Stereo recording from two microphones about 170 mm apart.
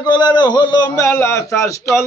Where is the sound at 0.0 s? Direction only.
25° left (ahead or behind).